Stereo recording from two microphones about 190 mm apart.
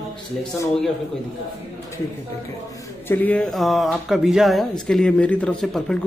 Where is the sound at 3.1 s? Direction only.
10° left (ahead or behind).